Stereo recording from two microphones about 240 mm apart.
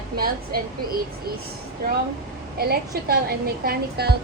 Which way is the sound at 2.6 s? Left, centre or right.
Right.